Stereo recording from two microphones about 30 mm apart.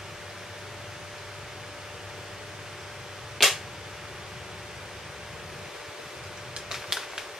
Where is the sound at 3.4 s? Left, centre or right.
Centre.